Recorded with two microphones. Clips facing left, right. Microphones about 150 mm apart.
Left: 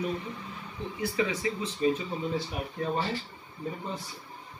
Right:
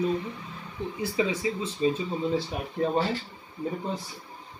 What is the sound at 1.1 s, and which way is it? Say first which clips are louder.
Speech: right 3 dB; 25° right (ahead or behind).